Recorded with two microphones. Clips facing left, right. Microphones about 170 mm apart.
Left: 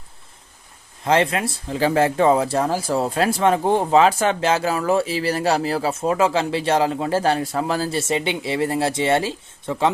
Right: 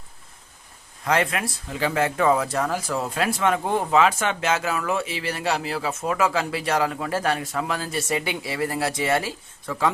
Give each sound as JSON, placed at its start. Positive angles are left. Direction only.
{"t": 1.0, "sound": "speech", "side_deg": 30}